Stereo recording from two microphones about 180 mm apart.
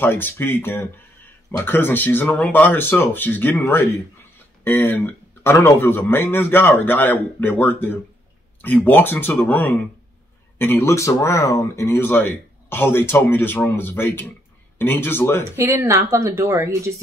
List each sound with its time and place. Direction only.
0.0 s speech: 10° left (ahead or behind)
15.5 s speech: 15° right (ahead or behind)